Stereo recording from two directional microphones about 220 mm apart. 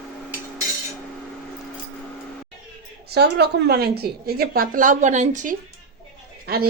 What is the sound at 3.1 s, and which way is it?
A woman's voice, 50° right (ahead or behind).